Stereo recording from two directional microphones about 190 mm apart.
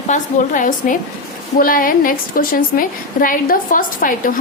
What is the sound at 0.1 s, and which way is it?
A woman's voice, 45° left (ahead or behind).